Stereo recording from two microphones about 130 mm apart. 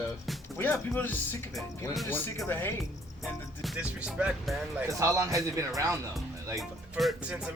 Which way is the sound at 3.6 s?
5° right (ahead or behind).